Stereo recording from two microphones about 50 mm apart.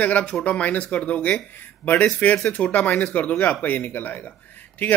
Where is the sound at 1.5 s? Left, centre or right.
Left.